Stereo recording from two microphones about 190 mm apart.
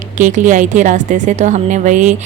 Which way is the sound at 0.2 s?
40° right (ahead or behind).